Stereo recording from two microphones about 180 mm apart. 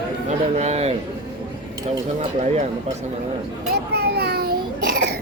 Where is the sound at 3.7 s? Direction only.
65° right (ahead or behind).